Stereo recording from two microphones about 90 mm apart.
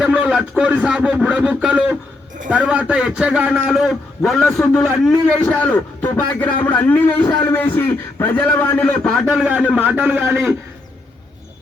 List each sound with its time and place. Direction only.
0.0 s a man's voice: 10° right (ahead or behind)
3.7 s a man's voice: centre (ahead or behind)
5.4 s a man's voice: 20° left (ahead or behind)
9.6 s a man's voice: 20° right (ahead or behind)